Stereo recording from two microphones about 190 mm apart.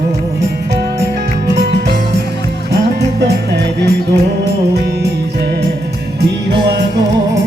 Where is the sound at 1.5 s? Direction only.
60° right (ahead or behind).